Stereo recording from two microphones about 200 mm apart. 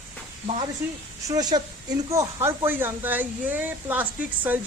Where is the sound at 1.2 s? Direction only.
20° right (ahead or behind).